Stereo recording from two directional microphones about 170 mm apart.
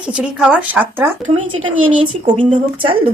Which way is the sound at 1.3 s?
30° right (ahead or behind).